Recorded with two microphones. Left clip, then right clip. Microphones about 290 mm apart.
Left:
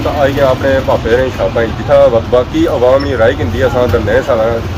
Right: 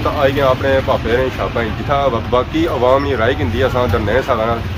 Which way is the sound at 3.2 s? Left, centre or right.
Centre.